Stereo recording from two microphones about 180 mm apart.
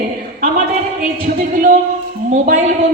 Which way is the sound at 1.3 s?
50° right (ahead or behind).